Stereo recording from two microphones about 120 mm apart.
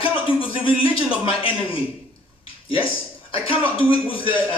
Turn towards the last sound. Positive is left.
turn(degrees=45)  # may be behind; listen again after turning